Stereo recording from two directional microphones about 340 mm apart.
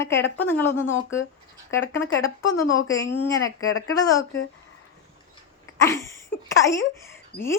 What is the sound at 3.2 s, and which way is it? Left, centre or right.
Speech, centre.